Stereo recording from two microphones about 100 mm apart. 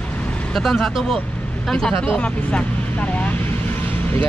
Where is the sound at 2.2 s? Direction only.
10° left (ahead or behind).